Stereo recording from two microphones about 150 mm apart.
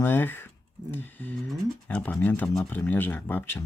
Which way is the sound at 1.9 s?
10° left (ahead or behind).